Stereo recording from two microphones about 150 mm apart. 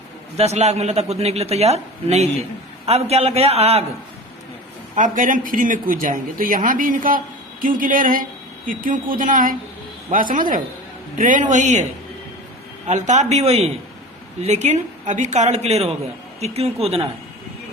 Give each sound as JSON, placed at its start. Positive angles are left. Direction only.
{"t": 0.3, "sound": "speech", "side_deg": -45}
{"t": 4.9, "sound": "speech", "side_deg": -60}
{"t": 12.9, "sound": "speech", "side_deg": -50}